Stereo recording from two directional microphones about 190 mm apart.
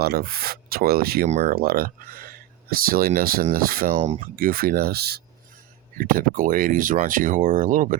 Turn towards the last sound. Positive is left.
turn(degrees=-45)  # may be behind; listen again after turning